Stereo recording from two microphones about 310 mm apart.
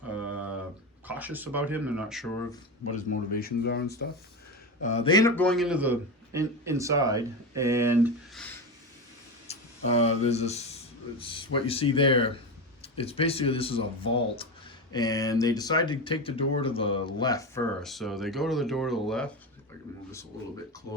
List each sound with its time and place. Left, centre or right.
1.0 s a man's voice: centre
2.9 s speech: left
4.8 s a man's voice: left; by 8.5 s centre
9.5 s speech: centre